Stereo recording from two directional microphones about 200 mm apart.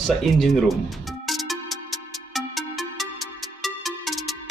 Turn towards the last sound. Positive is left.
turn(degrees=0)  # may be behind; listen again after turning